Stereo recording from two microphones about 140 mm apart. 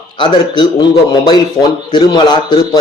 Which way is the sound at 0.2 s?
30° left (ahead or behind).